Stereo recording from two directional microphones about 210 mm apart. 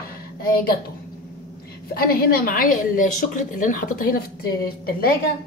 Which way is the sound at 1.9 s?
45° left (ahead or behind).